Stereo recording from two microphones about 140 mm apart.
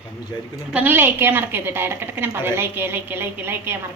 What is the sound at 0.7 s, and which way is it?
A woman's voice, 15° right (ahead or behind).